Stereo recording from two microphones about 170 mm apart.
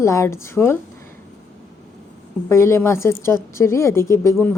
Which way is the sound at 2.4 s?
15° left (ahead or behind).